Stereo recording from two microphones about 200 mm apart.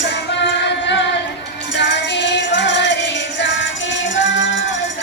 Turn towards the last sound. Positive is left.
turn(degrees=70)  # may be behind; listen again after turning